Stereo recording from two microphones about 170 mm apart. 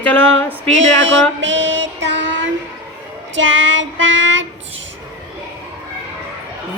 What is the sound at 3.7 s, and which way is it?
Child singing, 90° right.